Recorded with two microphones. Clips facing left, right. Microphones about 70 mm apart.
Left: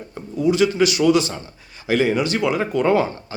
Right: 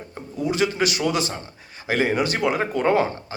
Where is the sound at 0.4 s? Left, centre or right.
Right.